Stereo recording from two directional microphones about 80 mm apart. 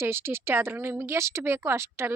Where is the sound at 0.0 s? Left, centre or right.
Right.